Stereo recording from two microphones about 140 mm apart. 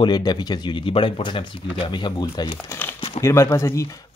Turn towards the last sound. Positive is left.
turn(degrees=20)  # may be behind; listen again after turning